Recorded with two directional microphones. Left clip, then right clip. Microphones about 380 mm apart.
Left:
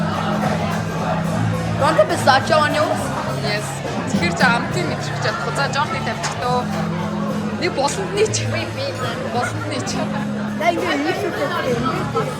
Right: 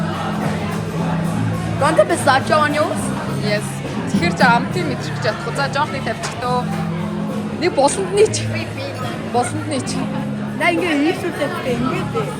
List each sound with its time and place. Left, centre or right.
1.8 s music: centre
4.1 s speech: centre
7.6 s speech: centre